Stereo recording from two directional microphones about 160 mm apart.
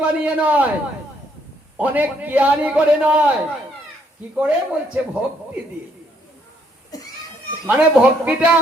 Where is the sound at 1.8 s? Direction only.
10° right (ahead or behind).